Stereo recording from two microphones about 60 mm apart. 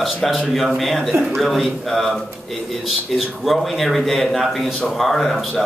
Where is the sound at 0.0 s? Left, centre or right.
Centre.